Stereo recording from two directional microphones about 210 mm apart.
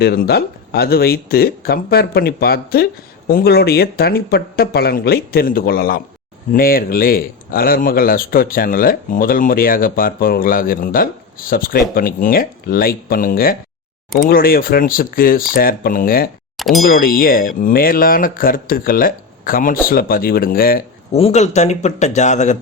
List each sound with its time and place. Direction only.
0.0 s speech: 50° left (ahead or behind)
16.6 s speech: centre (ahead or behind)
16.8 s speech: 45° left (ahead or behind)
21.1 s speech: 30° left (ahead or behind)